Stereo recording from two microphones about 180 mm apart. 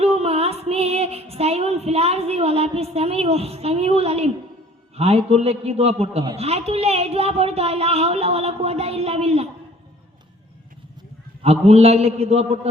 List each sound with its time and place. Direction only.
0.0 s female singing: 35° right (ahead or behind)
4.9 s a woman's voice: 35° right (ahead or behind)
11.4 s a woman's voice: 35° right (ahead or behind)